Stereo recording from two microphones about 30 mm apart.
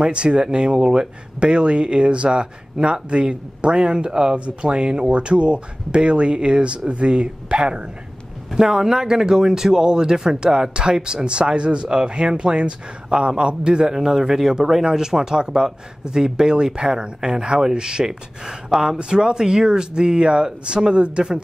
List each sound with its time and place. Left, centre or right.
0.0 s speech: right
8.5 s speech: centre
13.9 s speech: centre